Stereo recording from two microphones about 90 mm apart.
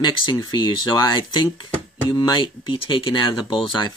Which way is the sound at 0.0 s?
60° left (ahead or behind).